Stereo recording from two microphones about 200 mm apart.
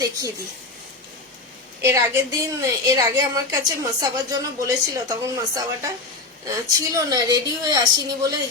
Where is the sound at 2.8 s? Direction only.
15° right (ahead or behind).